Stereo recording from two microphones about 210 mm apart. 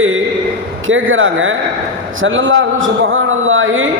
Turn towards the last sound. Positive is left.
turn(degrees=-70)  # may be behind; listen again after turning